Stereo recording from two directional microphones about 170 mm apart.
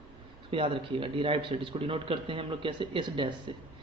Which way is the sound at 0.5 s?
30° right (ahead or behind).